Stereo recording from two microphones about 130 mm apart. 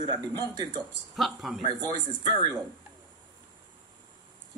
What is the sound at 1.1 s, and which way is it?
Speech, centre (ahead or behind).